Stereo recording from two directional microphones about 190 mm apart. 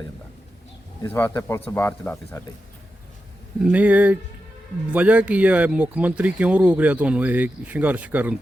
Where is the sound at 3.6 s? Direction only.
5° right (ahead or behind).